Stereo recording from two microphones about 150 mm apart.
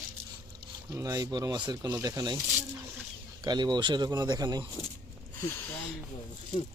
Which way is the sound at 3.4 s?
30° right (ahead or behind).